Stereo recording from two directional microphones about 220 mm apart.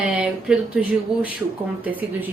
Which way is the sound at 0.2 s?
5° right (ahead or behind).